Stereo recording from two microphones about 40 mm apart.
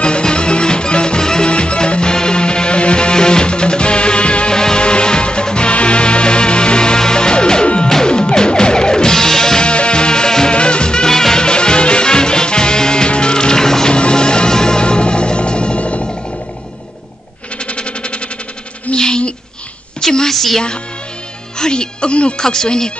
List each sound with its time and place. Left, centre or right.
0.0 s music: left
9.7 s music: left
11.4 s music: left
17.6 s music: left
18.9 s a sound: left
21.5 s music: centre
22.4 s speech: centre